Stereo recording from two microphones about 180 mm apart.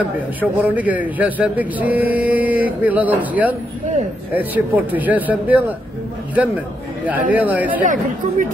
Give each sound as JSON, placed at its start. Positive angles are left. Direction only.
{"t": 0.4, "sound": "a man's voice", "side_deg": -10}
{"t": 7.1, "sound": "a man's voice", "side_deg": -10}
{"t": 7.8, "sound": "speech", "side_deg": -45}